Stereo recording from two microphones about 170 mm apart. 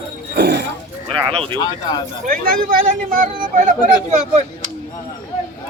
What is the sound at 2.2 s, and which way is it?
Speech, 55° right (ahead or behind).